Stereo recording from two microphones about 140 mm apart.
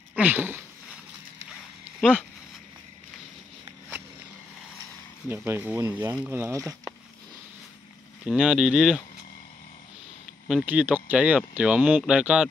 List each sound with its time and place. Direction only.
0.1 s a sound: 10° right (ahead or behind)
2.0 s speech: 5° left (ahead or behind)
5.3 s speech: 15° right (ahead or behind)
8.3 s speech: 5° right (ahead or behind)
10.5 s speech: 10° right (ahead or behind)